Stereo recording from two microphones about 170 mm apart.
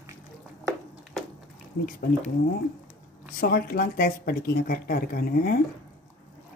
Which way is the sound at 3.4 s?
60° left (ahead or behind).